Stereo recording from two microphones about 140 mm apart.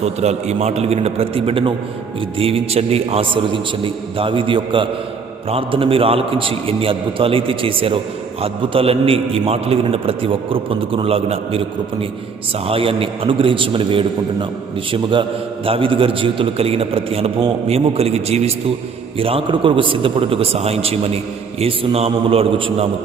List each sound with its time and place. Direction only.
0.0 s a man's voice: 50° right (ahead or behind)
12.6 s a man's voice: 40° right (ahead or behind)